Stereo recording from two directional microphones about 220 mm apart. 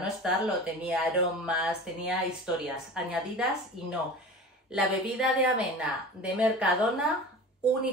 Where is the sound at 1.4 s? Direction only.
5° right (ahead or behind).